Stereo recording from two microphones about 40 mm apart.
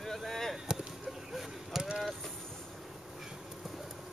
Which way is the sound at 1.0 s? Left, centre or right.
Centre.